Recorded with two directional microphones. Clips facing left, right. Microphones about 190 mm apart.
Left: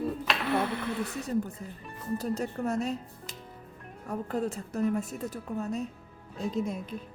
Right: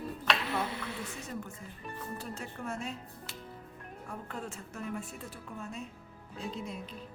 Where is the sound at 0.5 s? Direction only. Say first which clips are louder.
Left 7 dB; 60° left (ahead or behind).